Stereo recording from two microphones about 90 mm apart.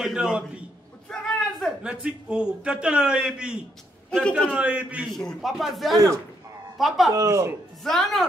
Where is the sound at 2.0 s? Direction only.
10° right (ahead or behind).